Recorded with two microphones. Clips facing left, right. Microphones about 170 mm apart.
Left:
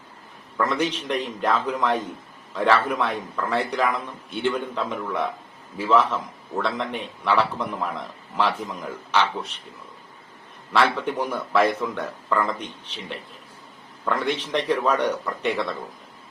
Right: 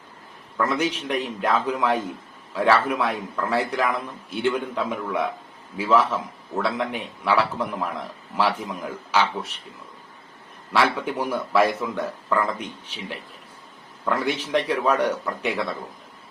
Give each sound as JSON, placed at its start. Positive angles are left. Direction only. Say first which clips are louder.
{"t": 0.5, "sound": "a man's voice", "louder": "even", "side_deg": -5}
{"t": 10.7, "sound": "a man's voice", "louder": "left 1 dB", "side_deg": -5}